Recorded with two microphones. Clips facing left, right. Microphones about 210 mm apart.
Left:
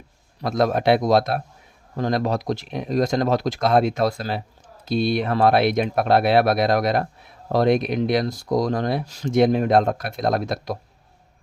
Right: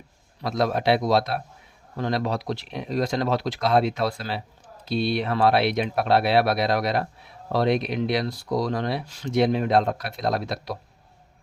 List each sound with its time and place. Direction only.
0.4 s speech: 50° left (ahead or behind)